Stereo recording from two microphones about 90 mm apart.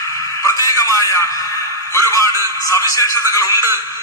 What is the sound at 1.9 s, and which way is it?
A man's voice, 35° left (ahead or behind).